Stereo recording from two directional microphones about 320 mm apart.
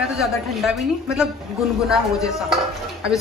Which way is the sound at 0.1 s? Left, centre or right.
Centre.